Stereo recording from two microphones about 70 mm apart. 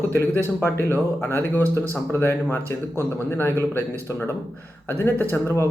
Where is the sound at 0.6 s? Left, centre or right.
Left.